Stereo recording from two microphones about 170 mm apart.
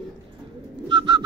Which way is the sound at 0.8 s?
30° right (ahead or behind).